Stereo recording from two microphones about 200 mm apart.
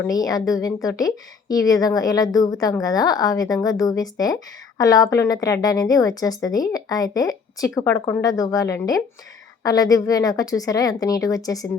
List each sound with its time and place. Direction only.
0.0 s a woman's voice: 20° left (ahead or behind)